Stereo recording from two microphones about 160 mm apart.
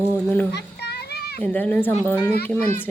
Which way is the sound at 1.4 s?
10° left (ahead or behind).